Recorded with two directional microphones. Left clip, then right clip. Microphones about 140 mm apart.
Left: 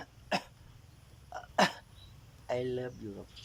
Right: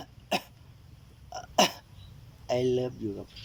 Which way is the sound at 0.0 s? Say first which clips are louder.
Right 3 dB; 20° right (ahead or behind).